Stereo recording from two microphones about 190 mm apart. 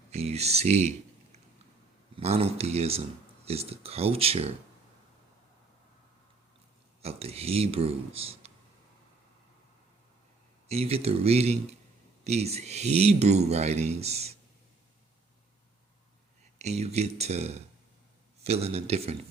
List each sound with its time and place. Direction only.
0.1 s speech: 35° right (ahead or behind)
7.0 s speech: 30° right (ahead or behind)
10.7 s speech: 30° right (ahead or behind)
16.6 s speech: 35° right (ahead or behind)